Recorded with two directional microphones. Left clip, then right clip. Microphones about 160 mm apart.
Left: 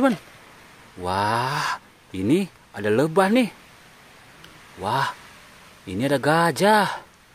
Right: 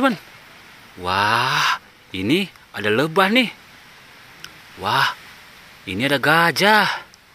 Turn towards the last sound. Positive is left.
turn(degrees=10)  # may be behind; listen again after turning